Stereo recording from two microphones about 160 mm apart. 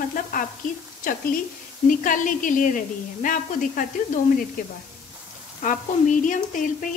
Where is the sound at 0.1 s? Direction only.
60° left (ahead or behind).